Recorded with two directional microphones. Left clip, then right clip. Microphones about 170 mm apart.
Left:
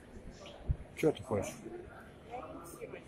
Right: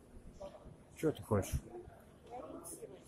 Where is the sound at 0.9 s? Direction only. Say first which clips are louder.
Left 4 dB; 25° right (ahead or behind).